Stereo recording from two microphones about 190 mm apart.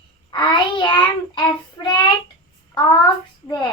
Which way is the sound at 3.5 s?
25° left (ahead or behind).